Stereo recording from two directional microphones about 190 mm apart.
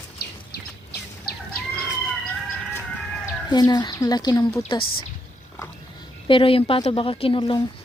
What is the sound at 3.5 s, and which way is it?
A woman's voice, 20° left (ahead or behind).